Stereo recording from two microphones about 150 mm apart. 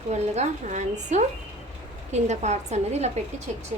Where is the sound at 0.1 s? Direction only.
50° right (ahead or behind).